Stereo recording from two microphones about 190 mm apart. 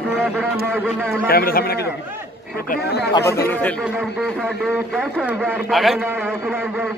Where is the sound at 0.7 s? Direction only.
5° left (ahead or behind).